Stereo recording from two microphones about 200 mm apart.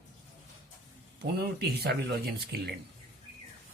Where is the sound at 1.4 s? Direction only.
55° right (ahead or behind).